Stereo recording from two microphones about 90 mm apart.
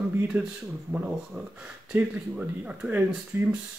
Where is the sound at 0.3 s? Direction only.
20° right (ahead or behind).